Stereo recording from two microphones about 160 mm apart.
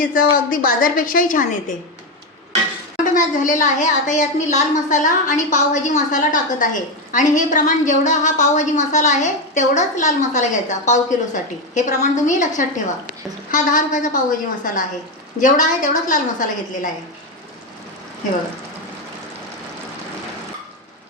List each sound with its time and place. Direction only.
0.0 s a woman's voice: 60° left (ahead or behind)
3.0 s a woman's voice: 55° left (ahead or behind)